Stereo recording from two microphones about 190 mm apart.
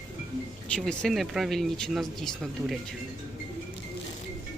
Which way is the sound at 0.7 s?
5° left (ahead or behind).